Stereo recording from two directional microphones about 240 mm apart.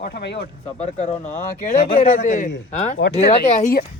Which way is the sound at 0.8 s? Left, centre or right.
Left.